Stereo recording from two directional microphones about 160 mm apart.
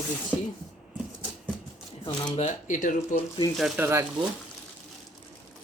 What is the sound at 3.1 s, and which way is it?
Speech, 30° left (ahead or behind).